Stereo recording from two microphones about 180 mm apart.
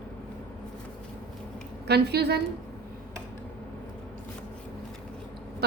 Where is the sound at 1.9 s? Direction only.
65° right (ahead or behind).